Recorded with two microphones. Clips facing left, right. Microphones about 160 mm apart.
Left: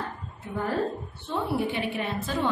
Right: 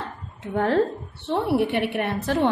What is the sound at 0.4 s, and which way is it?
Speech, 80° right.